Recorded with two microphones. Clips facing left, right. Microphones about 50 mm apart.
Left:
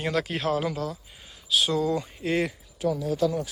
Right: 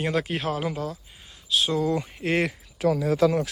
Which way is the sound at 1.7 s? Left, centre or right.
Right.